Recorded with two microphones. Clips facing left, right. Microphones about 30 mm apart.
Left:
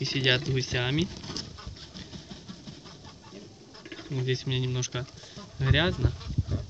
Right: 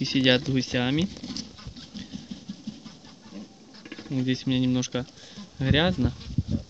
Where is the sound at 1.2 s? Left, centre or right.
Left.